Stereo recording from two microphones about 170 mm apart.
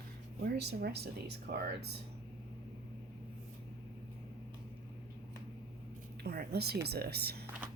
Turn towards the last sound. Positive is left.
turn(degrees=-70)  # may be behind; listen again after turning